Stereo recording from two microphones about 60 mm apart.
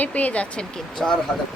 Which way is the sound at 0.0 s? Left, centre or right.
Left.